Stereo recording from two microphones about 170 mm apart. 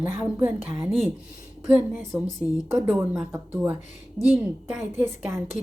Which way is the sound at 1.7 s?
10° right (ahead or behind).